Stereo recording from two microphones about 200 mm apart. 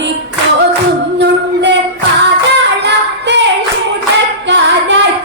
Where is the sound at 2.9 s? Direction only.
60° right (ahead or behind).